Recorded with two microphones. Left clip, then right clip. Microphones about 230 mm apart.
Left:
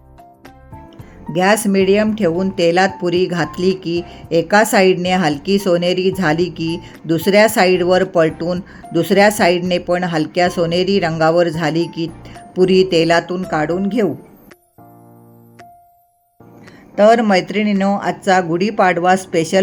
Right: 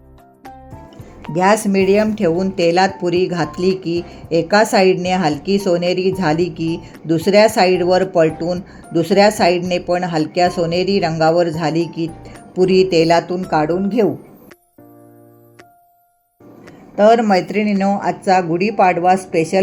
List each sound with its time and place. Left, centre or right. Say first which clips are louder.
1.3 s speech: even; centre
6.3 s speech: even; left
7.1 s speech: even; centre
12.9 s speech: even; centre
16.9 s speech: even; centre